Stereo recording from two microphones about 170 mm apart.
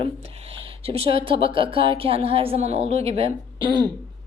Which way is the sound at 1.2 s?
30° right (ahead or behind).